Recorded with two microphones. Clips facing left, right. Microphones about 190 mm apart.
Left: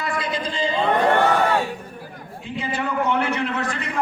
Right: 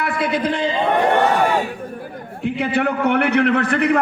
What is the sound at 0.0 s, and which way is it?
Speech, 65° right (ahead or behind).